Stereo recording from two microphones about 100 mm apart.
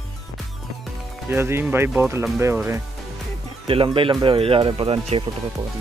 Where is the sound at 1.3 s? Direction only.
25° right (ahead or behind).